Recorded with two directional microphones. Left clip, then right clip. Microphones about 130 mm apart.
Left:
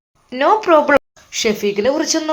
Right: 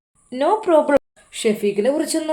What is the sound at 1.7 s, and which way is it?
Speech, 15° right (ahead or behind).